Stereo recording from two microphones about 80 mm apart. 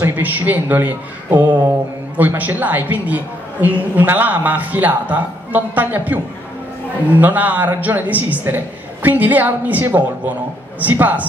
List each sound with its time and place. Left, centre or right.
0.0 s a man's voice: right
7.2 s a man's voice: right